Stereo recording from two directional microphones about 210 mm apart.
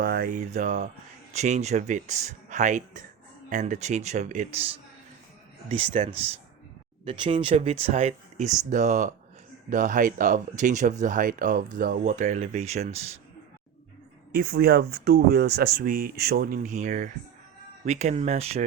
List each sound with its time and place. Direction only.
0.0 s speech: 45° right (ahead or behind)
5.6 s speech: 30° right (ahead or behind)
14.3 s speech: 45° right (ahead or behind); by 18.6 s 30° right (ahead or behind)